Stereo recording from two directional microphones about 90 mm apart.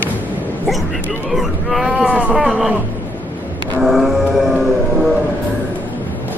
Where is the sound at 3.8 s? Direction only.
Centre (ahead or behind).